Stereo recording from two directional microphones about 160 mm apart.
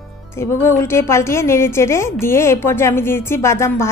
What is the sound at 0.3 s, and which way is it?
A woman's voice, 15° left (ahead or behind).